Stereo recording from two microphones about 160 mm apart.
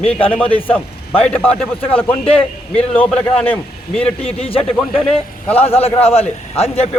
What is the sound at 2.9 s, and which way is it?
A man's voice, 5° left (ahead or behind).